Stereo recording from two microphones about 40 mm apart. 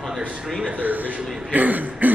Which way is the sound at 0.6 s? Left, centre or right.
Right.